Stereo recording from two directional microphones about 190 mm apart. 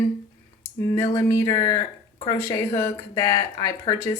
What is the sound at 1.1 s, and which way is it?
Speech, 15° left (ahead or behind).